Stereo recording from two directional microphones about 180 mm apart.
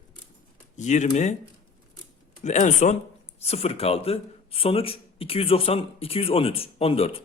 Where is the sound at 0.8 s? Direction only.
40° left (ahead or behind).